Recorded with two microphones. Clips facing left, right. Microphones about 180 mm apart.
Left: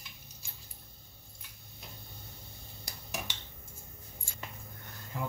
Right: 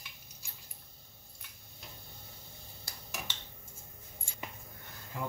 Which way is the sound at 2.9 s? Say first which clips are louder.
Left 2 dB; 20° left (ahead or behind).